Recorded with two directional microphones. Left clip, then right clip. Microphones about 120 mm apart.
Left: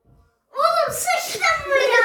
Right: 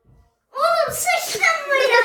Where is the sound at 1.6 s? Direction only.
15° right (ahead or behind).